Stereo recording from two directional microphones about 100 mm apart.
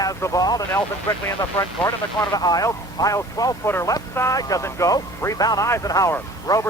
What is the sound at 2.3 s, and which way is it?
Speech, 40° left (ahead or behind).